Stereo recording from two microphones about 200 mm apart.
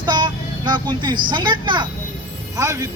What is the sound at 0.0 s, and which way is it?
Child singing, 20° right (ahead or behind).